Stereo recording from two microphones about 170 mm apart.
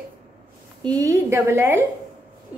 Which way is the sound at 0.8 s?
20° right (ahead or behind).